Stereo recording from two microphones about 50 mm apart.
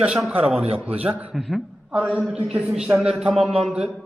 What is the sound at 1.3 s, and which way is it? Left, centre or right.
Speech, centre.